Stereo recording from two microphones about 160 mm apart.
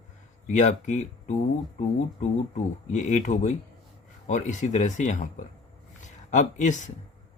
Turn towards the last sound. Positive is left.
turn(degrees=50)  # may be behind; listen again after turning